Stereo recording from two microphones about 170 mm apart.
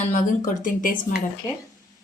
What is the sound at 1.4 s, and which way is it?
Speech, 25° left (ahead or behind).